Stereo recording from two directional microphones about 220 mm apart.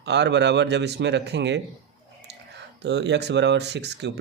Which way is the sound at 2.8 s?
50° right (ahead or behind).